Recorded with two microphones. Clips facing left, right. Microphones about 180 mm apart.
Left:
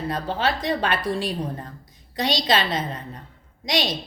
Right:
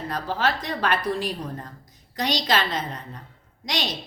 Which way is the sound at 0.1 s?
25° left (ahead or behind).